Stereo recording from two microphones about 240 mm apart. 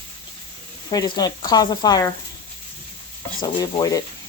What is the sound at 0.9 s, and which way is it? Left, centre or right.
Speech, centre.